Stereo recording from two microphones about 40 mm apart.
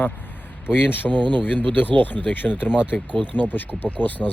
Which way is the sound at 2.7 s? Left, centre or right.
Right.